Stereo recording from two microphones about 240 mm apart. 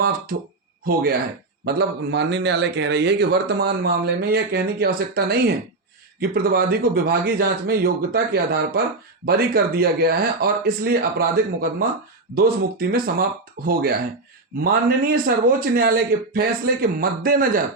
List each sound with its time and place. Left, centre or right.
0.0 s speech: right
1.6 s a man's voice: right